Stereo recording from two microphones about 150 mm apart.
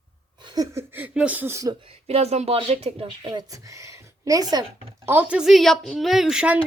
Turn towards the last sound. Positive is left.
turn(degrees=-5)  # may be behind; listen again after turning